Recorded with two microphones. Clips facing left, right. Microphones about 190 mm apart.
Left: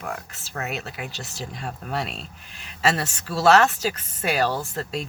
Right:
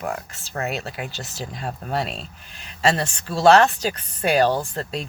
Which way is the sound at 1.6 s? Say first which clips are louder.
Right 3 dB; 35° right (ahead or behind).